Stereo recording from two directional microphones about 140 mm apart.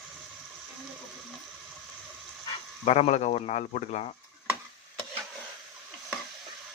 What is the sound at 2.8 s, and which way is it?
Speech, 50° left (ahead or behind).